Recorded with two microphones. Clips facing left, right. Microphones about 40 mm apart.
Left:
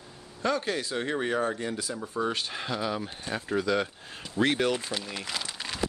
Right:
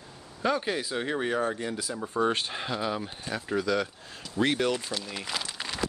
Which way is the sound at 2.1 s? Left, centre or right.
Right.